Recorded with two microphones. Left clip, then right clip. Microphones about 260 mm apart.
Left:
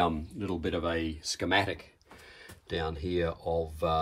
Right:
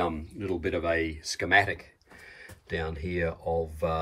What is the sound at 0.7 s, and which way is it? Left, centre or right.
Speech, left.